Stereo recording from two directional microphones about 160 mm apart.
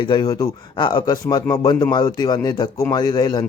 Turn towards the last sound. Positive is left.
turn(degrees=25)  # may be behind; listen again after turning